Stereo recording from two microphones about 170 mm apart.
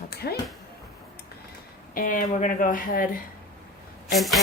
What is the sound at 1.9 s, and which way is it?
Speech, 55° left (ahead or behind).